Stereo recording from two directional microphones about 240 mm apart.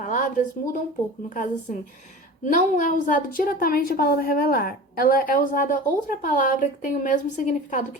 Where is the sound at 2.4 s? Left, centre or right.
Left.